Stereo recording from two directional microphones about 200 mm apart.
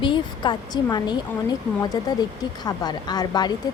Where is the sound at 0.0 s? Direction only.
25° left (ahead or behind).